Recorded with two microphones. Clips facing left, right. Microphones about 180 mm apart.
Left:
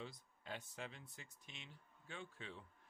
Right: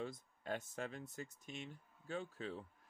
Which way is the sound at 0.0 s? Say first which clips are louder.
Right 7 dB; 45° right (ahead or behind).